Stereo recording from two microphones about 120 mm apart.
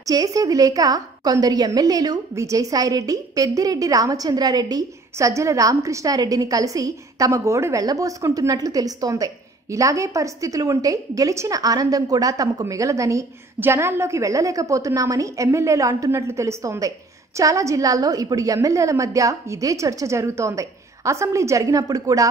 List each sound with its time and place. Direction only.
0.0 s a woman's voice: 30° right (ahead or behind)